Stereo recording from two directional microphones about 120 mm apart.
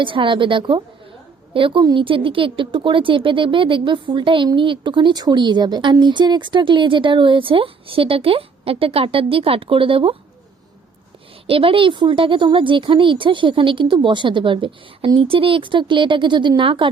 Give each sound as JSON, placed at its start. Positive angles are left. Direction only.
{"t": 0.0, "sound": "speech", "side_deg": -45}
{"t": 11.4, "sound": "speech", "side_deg": -50}